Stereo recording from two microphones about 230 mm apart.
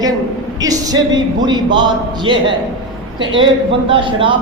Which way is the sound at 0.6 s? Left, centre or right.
Centre.